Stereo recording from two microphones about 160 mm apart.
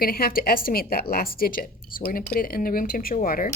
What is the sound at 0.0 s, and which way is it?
A woman's voice, 70° left (ahead or behind).